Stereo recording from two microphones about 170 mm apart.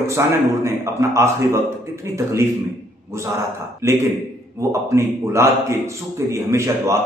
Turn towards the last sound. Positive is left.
turn(degrees=-15)  # may be behind; listen again after turning